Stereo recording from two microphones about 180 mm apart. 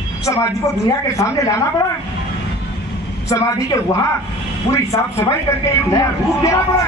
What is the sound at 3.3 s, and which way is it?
A man's voice, 15° left (ahead or behind).